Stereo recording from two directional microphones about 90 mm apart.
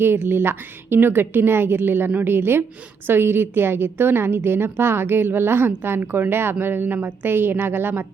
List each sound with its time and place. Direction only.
0.0 s a woman's voice: 25° right (ahead or behind)